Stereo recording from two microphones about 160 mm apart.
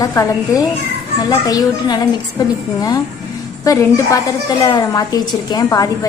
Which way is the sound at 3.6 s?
20° left (ahead or behind).